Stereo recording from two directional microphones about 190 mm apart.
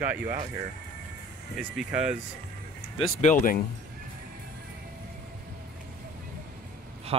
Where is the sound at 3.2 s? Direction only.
45° left (ahead or behind).